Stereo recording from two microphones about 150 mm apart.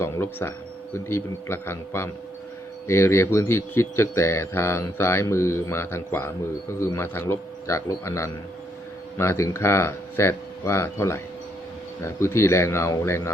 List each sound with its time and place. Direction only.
0.0 s speech: 15° left (ahead or behind)